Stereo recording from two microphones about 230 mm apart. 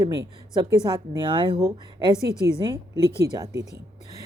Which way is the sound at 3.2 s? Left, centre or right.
Centre.